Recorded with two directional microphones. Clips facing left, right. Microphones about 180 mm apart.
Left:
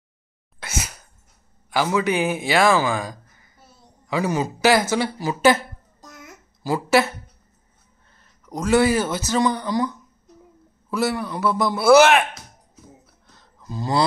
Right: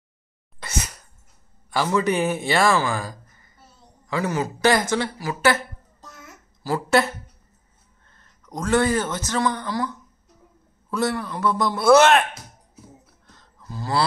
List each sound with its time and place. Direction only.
0.6 s sneeze: 5° left (ahead or behind)
1.7 s a man's voice: 5° left (ahead or behind)
2.7 s speech: 15° left (ahead or behind)
5.2 s a sound: 20° left (ahead or behind)
8.2 s a man's voice: 10° left (ahead or behind)
13.6 s a sound: 20° left (ahead or behind)